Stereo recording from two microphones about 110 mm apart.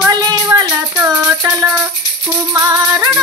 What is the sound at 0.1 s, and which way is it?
Music, 35° right (ahead or behind).